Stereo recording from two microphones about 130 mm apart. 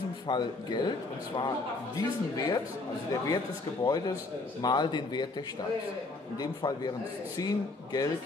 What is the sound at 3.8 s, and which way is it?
A man's voice, 30° left (ahead or behind).